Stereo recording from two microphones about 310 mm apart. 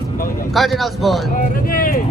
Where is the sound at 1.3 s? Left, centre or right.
Left.